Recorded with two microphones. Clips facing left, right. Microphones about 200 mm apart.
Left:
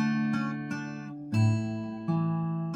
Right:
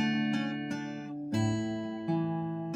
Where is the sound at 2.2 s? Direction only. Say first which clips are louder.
Left 1 dB; 10° right (ahead or behind).